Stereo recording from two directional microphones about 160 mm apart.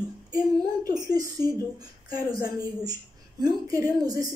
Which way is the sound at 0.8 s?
25° right (ahead or behind).